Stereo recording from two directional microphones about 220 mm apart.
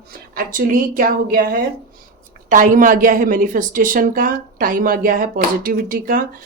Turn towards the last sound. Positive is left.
turn(degrees=-40)  # may be behind; listen again after turning